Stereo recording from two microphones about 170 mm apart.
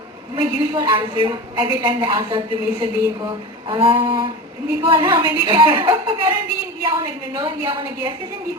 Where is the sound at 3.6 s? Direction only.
30° right (ahead or behind).